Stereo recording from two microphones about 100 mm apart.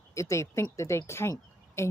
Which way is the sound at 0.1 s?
30° left (ahead or behind).